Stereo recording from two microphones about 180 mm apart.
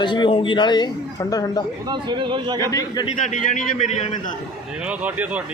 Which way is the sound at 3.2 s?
45° left (ahead or behind).